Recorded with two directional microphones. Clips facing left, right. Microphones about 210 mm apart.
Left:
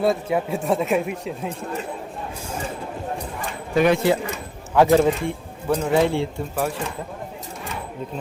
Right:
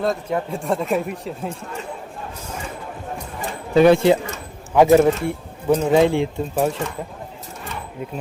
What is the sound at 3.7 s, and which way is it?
Speech, 30° right (ahead or behind).